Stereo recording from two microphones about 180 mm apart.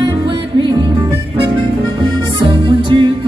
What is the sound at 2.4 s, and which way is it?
Music, 25° right (ahead or behind).